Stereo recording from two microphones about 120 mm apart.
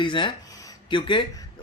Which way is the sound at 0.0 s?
45° left (ahead or behind).